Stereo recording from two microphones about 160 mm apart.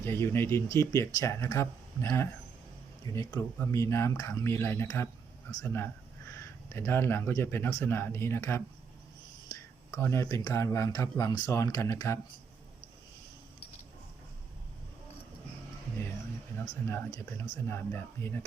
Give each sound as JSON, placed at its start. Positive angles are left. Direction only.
{"t": 0.0, "sound": "speech", "side_deg": 15}
{"t": 16.8, "sound": "speech", "side_deg": 15}